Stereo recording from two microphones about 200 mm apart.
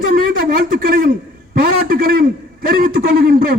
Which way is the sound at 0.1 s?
45° right (ahead or behind).